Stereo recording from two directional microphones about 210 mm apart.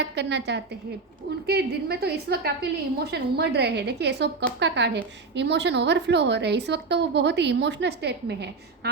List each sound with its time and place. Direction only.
0.2 s a woman's voice: 55° right (ahead or behind)